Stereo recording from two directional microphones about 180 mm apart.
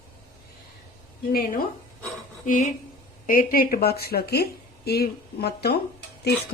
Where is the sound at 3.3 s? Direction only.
50° left (ahead or behind).